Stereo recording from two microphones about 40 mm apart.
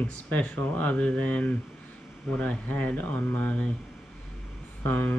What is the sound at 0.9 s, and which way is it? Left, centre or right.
Speech, left.